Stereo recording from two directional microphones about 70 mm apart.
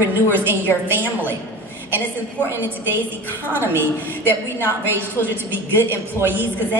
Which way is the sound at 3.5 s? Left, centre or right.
Right.